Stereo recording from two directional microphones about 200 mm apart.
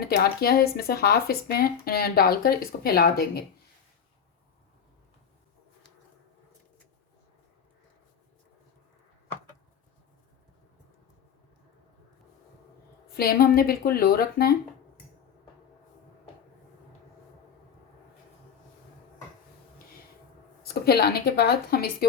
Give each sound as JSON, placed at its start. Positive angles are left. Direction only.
{"t": 0.0, "sound": "speech", "side_deg": 50}
{"t": 13.1, "sound": "speech", "side_deg": 50}
{"t": 20.8, "sound": "speech", "side_deg": 50}